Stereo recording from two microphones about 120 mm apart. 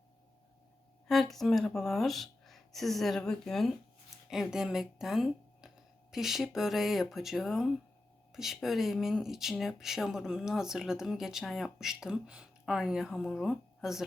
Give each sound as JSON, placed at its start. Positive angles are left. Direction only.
{"t": 1.0, "sound": "speech", "side_deg": 0}